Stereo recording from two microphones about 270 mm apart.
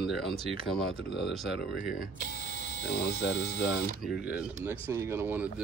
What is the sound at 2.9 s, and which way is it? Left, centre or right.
Speech, left.